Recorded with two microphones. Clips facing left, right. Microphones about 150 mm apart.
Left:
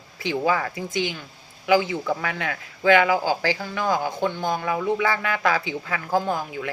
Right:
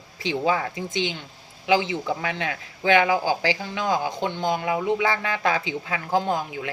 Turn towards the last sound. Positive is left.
turn(degrees=-20)  # may be behind; listen again after turning